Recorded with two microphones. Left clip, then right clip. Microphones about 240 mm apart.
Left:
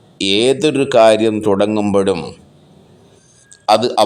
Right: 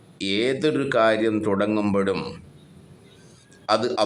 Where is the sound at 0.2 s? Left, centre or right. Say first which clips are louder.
Left 9 dB; centre.